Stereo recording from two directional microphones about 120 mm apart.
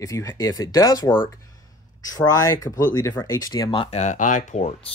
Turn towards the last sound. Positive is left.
turn(degrees=70)  # may be behind; listen again after turning